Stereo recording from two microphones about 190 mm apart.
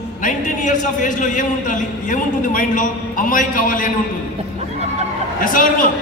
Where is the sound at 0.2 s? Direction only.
40° left (ahead or behind).